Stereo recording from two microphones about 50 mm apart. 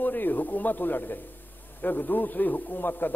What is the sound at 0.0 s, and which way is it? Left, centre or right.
A man's voice, left.